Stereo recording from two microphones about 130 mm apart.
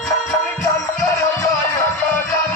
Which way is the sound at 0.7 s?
20° left (ahead or behind).